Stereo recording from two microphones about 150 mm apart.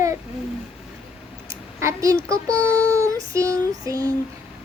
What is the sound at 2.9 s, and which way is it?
Child singing, 20° right (ahead or behind).